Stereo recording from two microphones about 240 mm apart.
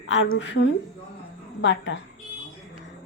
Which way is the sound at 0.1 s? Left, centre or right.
Left.